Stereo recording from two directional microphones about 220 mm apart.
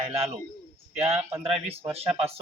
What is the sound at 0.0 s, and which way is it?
Speech, 25° right (ahead or behind).